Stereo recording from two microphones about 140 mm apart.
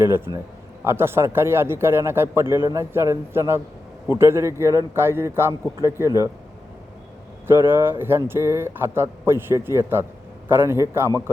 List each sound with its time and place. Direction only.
0.0 s a man's voice: 15° right (ahead or behind)
7.4 s speech: 15° right (ahead or behind)